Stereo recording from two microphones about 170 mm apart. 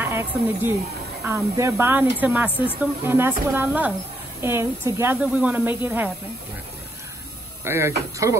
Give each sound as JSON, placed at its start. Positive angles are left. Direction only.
{"t": 0.0, "sound": "speech", "side_deg": -15}
{"t": 7.6, "sound": "speech", "side_deg": -15}